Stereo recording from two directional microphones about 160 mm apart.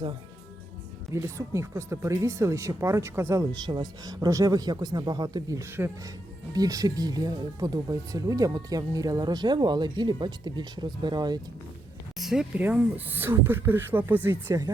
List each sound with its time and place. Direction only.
1.1 s speech: 20° right (ahead or behind)
12.1 s speech: centre (ahead or behind); by 14.7 s 20° right (ahead or behind)